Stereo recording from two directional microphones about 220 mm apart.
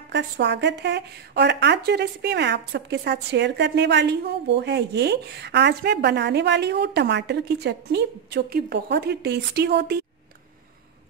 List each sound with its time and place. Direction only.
0.1 s speech: 50° right (ahead or behind)